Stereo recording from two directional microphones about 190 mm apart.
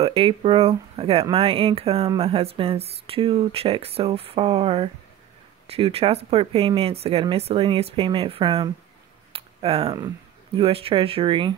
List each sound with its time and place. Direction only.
0.0 s speech: 30° right (ahead or behind)
9.3 s a sound: 30° right (ahead or behind)
9.9 s speech: 25° right (ahead or behind)